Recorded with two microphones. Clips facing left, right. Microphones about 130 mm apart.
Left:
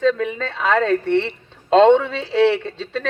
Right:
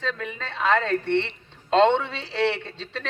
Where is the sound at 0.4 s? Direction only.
55° left (ahead or behind).